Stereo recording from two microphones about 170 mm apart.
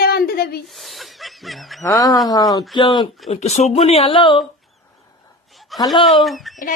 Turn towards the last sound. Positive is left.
turn(degrees=0)  # may be behind; listen again after turning